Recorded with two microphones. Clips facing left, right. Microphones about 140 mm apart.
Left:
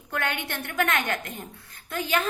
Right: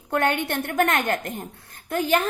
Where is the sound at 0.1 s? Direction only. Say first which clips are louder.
Right 7 dB; 55° right (ahead or behind).